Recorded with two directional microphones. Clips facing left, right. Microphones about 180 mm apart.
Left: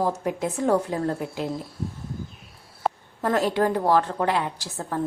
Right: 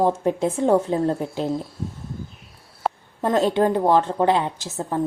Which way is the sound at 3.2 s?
20° right (ahead or behind).